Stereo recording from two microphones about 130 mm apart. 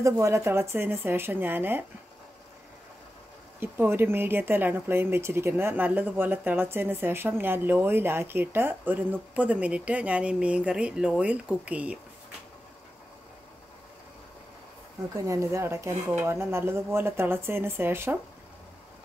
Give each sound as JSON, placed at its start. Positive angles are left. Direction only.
{"t": 0.0, "sound": "speech", "side_deg": -20}
{"t": 3.5, "sound": "speech", "side_deg": -15}
{"t": 15.2, "sound": "speech", "side_deg": -20}